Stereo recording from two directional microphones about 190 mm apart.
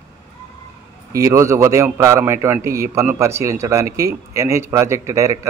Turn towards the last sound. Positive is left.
turn(degrees=-15)  # may be behind; listen again after turning